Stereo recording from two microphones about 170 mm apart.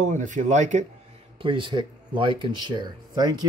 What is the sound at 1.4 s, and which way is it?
Speech, 30° right (ahead or behind).